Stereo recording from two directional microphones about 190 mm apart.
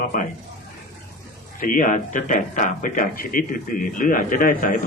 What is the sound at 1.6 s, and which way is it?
Speech, 45° left (ahead or behind).